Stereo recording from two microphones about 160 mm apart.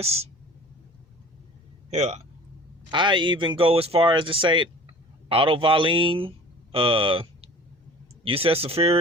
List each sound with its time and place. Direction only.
0.0 s speech: 40° right (ahead or behind)
1.9 s a man's voice: 45° right (ahead or behind)
2.9 s speech: 30° right (ahead or behind)